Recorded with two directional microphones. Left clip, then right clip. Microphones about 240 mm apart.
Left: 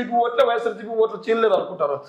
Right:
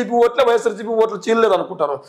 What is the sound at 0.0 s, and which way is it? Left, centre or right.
A man's voice, right.